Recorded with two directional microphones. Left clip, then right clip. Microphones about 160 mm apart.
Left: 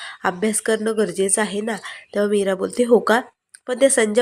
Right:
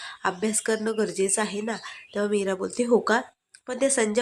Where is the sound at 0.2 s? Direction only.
20° left (ahead or behind).